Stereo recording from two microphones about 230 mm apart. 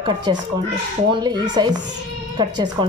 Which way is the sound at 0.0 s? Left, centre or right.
Centre.